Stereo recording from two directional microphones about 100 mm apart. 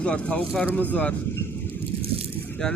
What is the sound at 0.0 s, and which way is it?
Speech, 10° left (ahead or behind).